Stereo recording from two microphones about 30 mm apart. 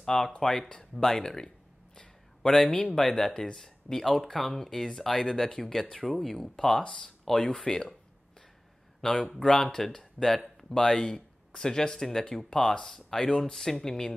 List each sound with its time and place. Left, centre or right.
0.0 s speech: centre
2.6 s speech: left
3.0 s speech: centre
6.0 s speech: centre
6.5 s speech: centre
6.8 s speech: left
7.2 s speech: centre
7.6 s speech: left
9.0 s speech: centre